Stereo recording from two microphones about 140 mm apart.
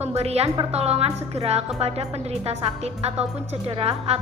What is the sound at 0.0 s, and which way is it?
Speech, 50° right (ahead or behind).